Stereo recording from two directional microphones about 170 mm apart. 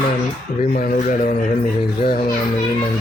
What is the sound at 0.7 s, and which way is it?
Speech, 55° left (ahead or behind).